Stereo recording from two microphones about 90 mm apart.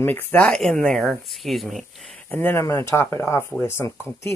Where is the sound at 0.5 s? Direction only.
5° left (ahead or behind).